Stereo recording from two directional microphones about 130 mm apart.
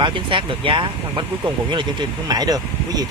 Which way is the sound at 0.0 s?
40° right (ahead or behind).